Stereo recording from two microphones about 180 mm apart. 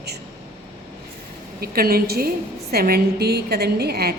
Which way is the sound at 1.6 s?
60° right (ahead or behind).